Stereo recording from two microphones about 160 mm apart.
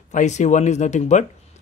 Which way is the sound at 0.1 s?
50° left (ahead or behind).